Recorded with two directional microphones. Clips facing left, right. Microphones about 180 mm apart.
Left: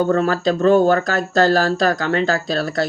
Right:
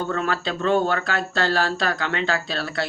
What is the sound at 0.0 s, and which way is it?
Speech, 40° left (ahead or behind).